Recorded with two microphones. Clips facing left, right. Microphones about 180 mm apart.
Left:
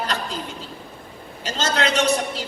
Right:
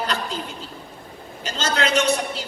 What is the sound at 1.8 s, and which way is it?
Speech, 35° left (ahead or behind).